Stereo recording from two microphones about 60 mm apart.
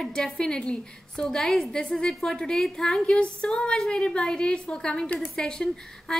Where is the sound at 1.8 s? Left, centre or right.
Centre.